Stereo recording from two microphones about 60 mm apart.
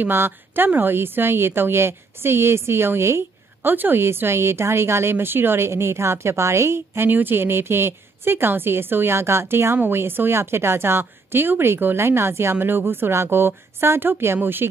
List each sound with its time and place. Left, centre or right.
0.0 s speech: right
3.6 s a woman's voice: right